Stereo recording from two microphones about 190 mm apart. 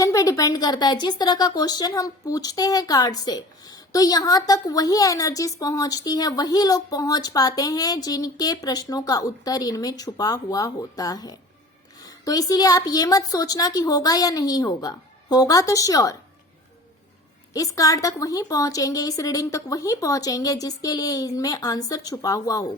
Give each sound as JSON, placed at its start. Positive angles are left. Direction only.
{"t": 0.0, "sound": "a woman's voice", "side_deg": 20}
{"t": 17.5, "sound": "a woman's voice", "side_deg": 20}